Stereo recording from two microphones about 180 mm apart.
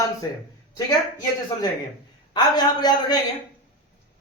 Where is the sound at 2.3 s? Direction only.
20° left (ahead or behind).